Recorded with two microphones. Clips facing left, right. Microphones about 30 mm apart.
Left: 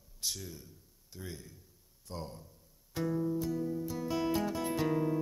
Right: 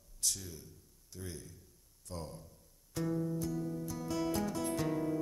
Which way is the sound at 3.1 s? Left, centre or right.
Centre.